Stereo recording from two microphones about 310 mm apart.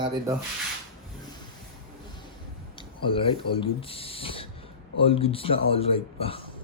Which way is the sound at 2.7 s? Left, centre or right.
Centre.